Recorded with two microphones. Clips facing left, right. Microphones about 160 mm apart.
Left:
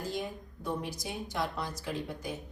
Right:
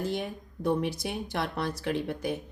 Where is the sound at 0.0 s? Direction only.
65° right (ahead or behind).